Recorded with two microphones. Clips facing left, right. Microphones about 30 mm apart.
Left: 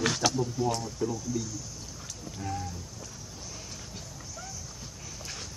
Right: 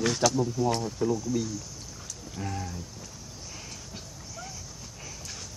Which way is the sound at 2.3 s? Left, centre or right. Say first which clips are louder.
Right 1 dB; right.